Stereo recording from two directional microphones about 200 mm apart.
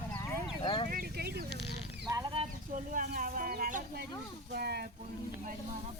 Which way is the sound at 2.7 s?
40° right (ahead or behind).